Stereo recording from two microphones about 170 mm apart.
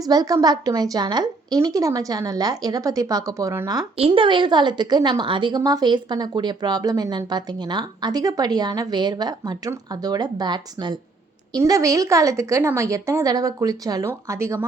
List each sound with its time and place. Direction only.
0.0 s a woman's voice: 20° right (ahead or behind)
3.9 s a woman's voice: 35° right (ahead or behind); by 14.7 s 15° right (ahead or behind)